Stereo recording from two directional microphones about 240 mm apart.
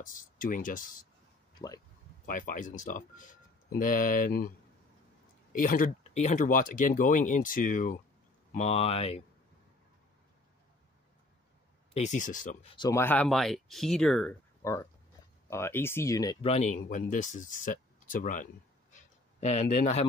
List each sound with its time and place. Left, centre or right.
0.0 s speech: left
2.2 s speech: left
5.5 s speech: left
11.9 s speech: left
12.7 s speech: centre
14.6 s speech: centre; by 20.1 s left